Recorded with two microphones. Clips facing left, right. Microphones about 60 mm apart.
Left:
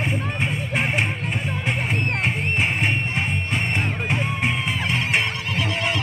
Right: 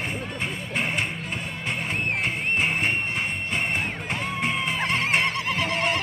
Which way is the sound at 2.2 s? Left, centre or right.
Left.